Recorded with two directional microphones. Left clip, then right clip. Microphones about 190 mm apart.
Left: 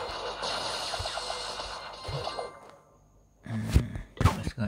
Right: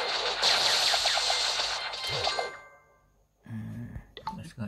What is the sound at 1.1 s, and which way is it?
Music, 45° right (ahead or behind).